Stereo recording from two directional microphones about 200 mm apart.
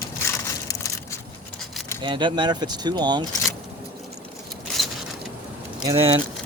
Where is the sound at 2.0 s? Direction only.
25° right (ahead or behind).